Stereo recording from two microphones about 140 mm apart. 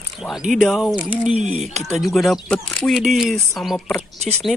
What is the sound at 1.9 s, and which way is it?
Speech, centre (ahead or behind).